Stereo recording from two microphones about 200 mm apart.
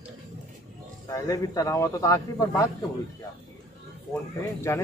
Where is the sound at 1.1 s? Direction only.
15° left (ahead or behind).